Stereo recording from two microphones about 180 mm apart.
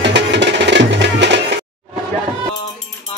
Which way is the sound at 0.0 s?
75° right (ahead or behind).